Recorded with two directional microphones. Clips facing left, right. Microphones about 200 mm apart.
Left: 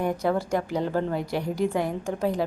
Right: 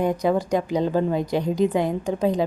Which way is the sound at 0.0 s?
15° right (ahead or behind).